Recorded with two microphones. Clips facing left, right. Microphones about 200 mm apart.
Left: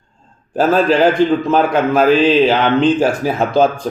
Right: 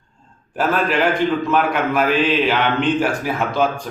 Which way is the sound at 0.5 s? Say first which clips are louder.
Left 6 dB; 30° left (ahead or behind).